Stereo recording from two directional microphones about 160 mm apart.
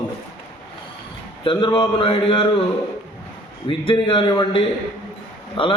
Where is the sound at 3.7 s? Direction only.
30° left (ahead or behind).